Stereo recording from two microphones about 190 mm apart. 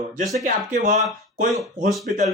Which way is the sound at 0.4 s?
40° right (ahead or behind).